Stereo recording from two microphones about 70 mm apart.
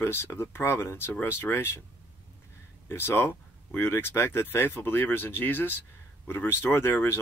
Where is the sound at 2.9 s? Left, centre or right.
Left.